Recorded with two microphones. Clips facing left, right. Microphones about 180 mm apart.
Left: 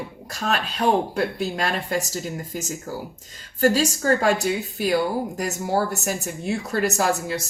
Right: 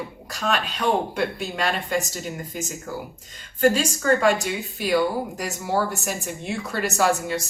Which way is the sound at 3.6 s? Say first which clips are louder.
Even; 35° left (ahead or behind).